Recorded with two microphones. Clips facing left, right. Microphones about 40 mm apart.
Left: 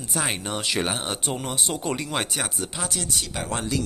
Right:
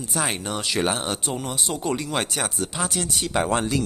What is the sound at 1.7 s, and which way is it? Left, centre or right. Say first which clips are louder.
Speech: right 4 dB; centre.